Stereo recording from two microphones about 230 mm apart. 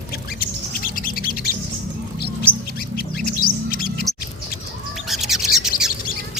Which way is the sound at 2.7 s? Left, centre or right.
Left.